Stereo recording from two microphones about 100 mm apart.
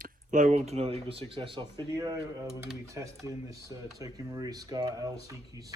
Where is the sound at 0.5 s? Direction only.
90° right; by 1.8 s 55° right (ahead or behind).